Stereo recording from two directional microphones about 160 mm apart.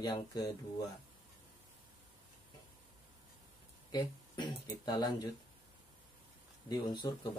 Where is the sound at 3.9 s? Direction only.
25° left (ahead or behind).